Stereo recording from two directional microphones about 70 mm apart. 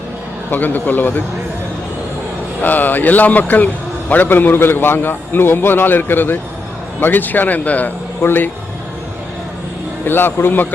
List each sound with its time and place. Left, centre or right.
0.5 s a man's voice: left
2.6 s a man's voice: left
10.1 s a man's voice: left